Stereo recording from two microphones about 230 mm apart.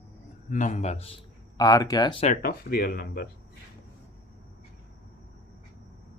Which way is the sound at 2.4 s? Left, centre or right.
Left.